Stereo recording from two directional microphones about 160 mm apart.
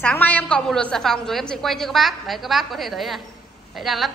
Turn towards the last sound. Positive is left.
turn(degrees=0)  # may be behind; listen again after turning